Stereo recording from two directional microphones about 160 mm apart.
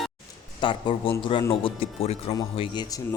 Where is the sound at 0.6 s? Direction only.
30° left (ahead or behind).